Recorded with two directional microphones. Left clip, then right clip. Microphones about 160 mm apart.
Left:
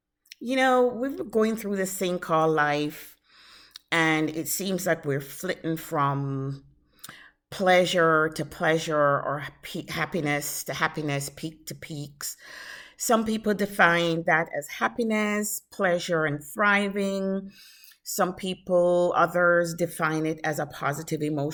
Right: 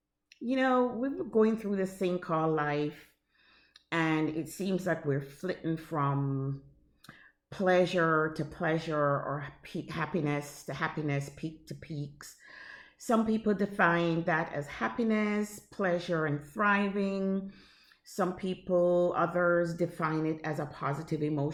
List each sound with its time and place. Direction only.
0.3 s speech: 20° left (ahead or behind)
9.6 s speech: 15° left (ahead or behind)